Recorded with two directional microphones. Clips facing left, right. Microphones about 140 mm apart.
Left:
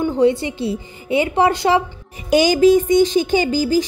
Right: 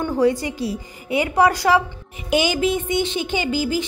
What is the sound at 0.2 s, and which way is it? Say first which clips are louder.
Speech: left 2 dB; 25° left (ahead or behind).